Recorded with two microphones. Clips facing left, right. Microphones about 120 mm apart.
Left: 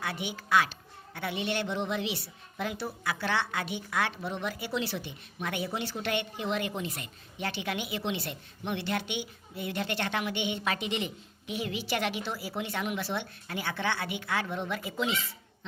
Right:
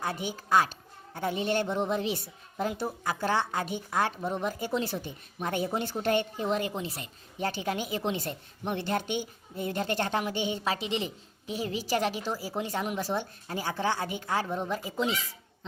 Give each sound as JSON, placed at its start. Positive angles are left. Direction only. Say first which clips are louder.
{"t": 0.0, "sound": "a woman's voice", "louder": "right 2 dB", "side_deg": -40}